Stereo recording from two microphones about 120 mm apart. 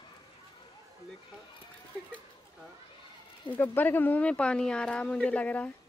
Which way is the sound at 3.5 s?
15° left (ahead or behind).